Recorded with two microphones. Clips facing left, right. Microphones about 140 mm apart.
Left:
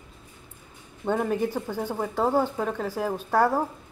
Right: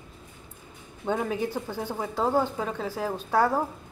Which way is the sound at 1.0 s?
15° left (ahead or behind).